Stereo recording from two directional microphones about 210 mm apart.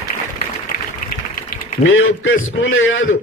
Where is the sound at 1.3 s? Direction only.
40° left (ahead or behind).